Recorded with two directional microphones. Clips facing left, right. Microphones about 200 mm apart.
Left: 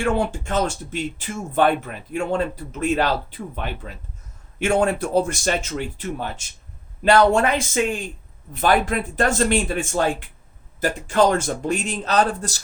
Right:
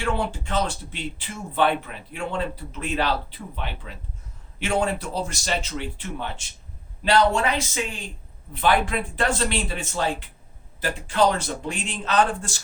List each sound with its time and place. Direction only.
0.0 s speech: 45° left (ahead or behind)